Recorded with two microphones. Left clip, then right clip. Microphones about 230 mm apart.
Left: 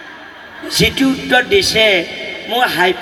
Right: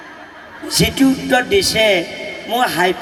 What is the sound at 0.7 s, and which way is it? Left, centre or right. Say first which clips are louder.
A man's voice: left 1 dB; right.